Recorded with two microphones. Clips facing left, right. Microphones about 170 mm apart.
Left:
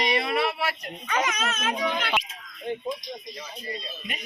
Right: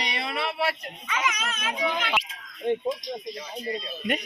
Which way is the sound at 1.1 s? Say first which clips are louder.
Left 3 dB; 45° left (ahead or behind).